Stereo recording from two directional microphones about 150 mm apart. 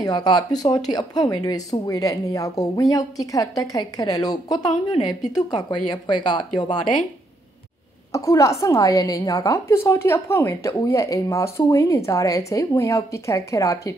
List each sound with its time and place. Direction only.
0.0 s speech: 25° left (ahead or behind)
8.1 s speech: 20° left (ahead or behind)